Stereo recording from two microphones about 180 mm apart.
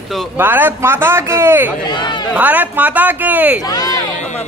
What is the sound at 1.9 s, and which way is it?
Speech, 25° left (ahead or behind).